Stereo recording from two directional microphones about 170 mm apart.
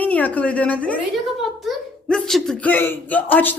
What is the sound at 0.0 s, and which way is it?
A child's voice, 10° left (ahead or behind).